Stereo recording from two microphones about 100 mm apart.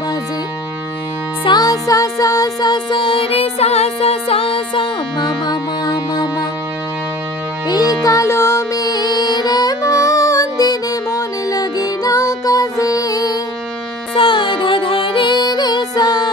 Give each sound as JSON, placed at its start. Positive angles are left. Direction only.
{"t": 1.4, "sound": "music", "side_deg": 40}
{"t": 5.4, "sound": "music", "side_deg": 45}
{"t": 7.6, "sound": "music", "side_deg": 40}
{"t": 8.8, "sound": "music", "side_deg": 40}
{"t": 14.1, "sound": "music", "side_deg": 55}